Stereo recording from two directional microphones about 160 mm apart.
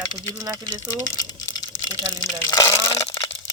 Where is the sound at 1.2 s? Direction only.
25° left (ahead or behind).